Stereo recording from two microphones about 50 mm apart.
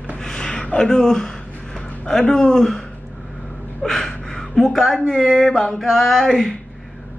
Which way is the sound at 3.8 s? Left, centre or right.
Centre.